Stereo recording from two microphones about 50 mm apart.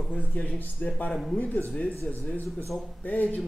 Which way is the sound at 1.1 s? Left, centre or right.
Centre.